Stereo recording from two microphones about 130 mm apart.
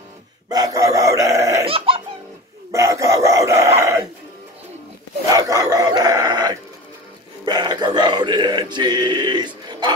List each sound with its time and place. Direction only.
0.5 s chicken: 25° right (ahead or behind)
1.7 s laughter: 45° right (ahead or behind)
2.7 s chicken: 25° right (ahead or behind)
5.3 s a sound: 25° right (ahead or behind)